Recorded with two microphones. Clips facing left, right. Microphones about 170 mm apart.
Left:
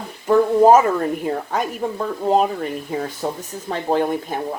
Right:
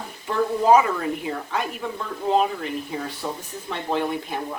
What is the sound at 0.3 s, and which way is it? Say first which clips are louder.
A woman's voice: left 6 dB; 45° left (ahead or behind).